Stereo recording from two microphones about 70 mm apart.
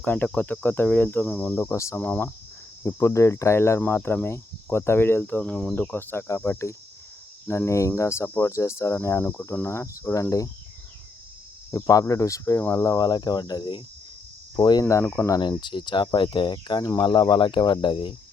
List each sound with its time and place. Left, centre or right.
0.0 s cricket: left
1.7 s speech: left
2.0 s cricket: left
2.8 s cricket: left
5.4 s cricket: centre
5.9 s cricket: left
6.2 s speech: left
8.4 s cricket: left
9.6 s speech: left
11.7 s speech: left
13.0 s cricket: left
15.0 s cricket: left
15.6 s speech: left